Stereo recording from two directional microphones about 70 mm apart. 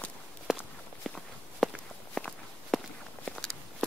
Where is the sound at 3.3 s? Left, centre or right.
Centre.